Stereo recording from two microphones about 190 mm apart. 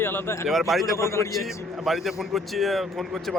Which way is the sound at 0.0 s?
10° left (ahead or behind).